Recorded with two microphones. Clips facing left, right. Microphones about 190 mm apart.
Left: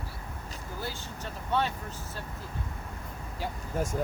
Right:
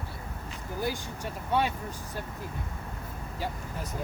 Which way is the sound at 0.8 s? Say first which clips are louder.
Right 7 dB; 15° right (ahead or behind).